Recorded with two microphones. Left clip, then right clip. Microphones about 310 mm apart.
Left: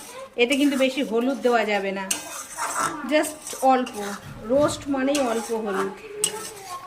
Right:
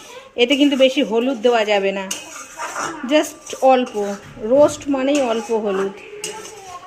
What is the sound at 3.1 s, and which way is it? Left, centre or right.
Speech, centre.